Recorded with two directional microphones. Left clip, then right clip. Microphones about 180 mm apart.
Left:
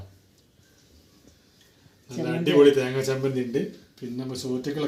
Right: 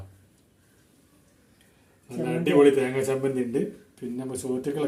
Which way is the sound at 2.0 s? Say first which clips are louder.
Even; centre (ahead or behind).